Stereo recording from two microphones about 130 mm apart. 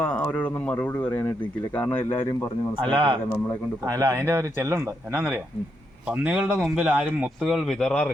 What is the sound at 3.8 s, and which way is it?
A man's voice, 25° right (ahead or behind).